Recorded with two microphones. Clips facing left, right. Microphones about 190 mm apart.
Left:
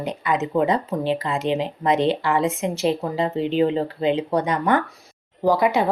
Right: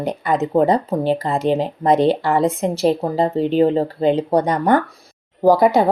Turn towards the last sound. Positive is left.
turn(degrees=-40)  # may be behind; listen again after turning